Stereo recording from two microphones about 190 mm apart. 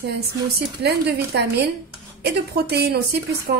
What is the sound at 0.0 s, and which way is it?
A woman's voice, 60° right (ahead or behind).